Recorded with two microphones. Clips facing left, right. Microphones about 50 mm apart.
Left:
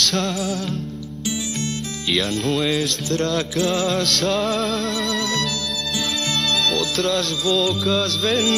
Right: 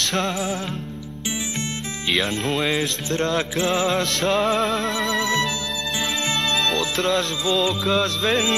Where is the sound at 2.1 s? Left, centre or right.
Right.